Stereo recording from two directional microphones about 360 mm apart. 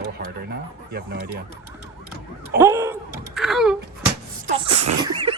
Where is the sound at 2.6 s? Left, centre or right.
Centre.